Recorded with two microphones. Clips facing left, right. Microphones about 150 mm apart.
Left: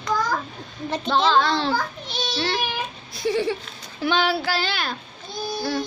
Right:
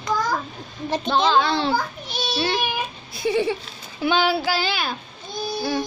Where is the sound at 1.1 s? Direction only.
10° right (ahead or behind).